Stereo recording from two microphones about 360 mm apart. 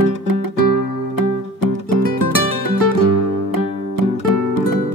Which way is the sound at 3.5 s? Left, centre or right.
Left.